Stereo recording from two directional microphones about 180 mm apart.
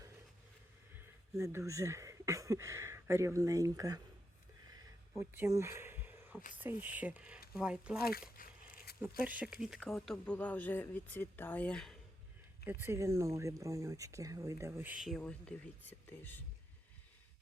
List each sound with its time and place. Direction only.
0.9 s speech: 15° right (ahead or behind)
5.1 s speech: 10° right (ahead or behind)
8.4 s a sound: 50° left (ahead or behind)
8.9 s zipper: 60° left (ahead or behind)
9.2 s speech: 10° right (ahead or behind)
12.6 s speech: 15° right (ahead or behind); by 16.4 s 10° left (ahead or behind)